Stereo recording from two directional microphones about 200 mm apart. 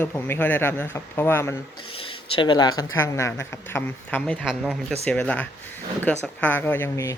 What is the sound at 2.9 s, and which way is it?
Speech, 15° left (ahead or behind).